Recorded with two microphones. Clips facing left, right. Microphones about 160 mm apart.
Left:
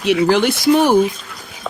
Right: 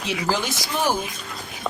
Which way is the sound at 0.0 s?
70° left (ahead or behind).